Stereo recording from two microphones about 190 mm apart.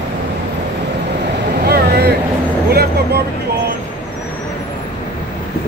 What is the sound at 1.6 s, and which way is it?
Vehicle, 55° right (ahead or behind).